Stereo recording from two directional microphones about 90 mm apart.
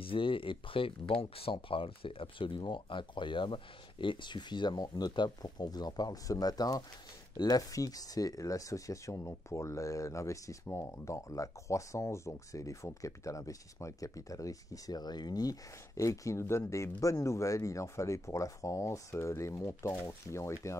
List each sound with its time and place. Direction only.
0.0 s speech: 75° left (ahead or behind); by 20.7 s 35° left (ahead or behind)